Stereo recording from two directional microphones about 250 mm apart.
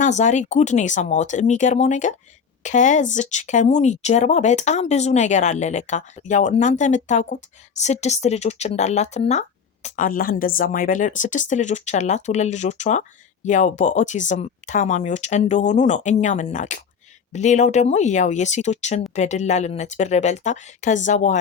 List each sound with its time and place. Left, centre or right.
0.0 s speech: left